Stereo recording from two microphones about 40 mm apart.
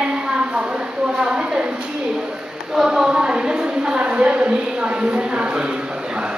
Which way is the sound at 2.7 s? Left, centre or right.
Centre.